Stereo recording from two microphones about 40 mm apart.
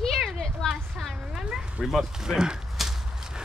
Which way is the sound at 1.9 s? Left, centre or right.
Centre.